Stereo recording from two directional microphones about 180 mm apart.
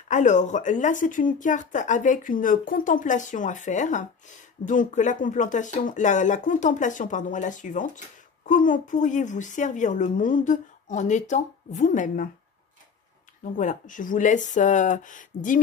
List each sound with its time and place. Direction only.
0.1 s speech: 45° left (ahead or behind)
13.4 s speech: 45° left (ahead or behind)